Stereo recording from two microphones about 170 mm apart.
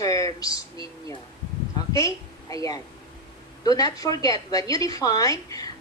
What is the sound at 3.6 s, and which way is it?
A woman's voice, 20° left (ahead or behind).